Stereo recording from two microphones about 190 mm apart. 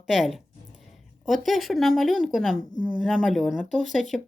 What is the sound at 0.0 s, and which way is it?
Speech, centre (ahead or behind).